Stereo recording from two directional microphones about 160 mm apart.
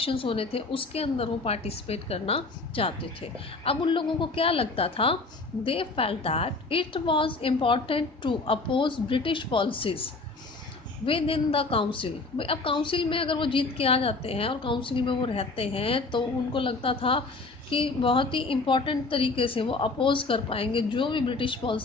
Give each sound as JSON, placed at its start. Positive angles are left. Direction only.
{"t": 0.0, "sound": "a woman's voice", "side_deg": 35}